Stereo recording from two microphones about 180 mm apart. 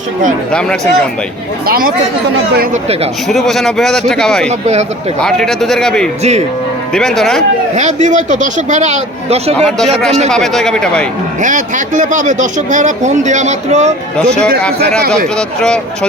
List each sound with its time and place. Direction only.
1.6 s speech: 55° right (ahead or behind)
3.2 s a man's voice: centre (ahead or behind)
4.4 s a man's voice: 40° right (ahead or behind)
5.2 s a man's voice: centre (ahead or behind)
7.8 s a man's voice: 40° right (ahead or behind)
9.6 s a man's voice: 5° left (ahead or behind)
11.4 s speech: 45° right (ahead or behind)
15.4 s a man's voice: 5° left (ahead or behind)